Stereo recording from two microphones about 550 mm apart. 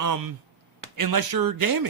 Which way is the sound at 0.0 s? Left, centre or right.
Right.